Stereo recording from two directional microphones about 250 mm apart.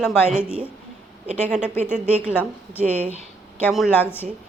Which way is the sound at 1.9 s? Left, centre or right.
Right.